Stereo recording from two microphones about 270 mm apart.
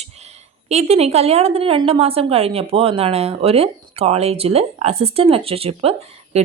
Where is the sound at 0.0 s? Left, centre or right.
Right.